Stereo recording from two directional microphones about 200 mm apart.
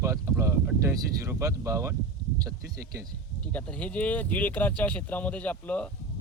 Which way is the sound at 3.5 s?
5° left (ahead or behind).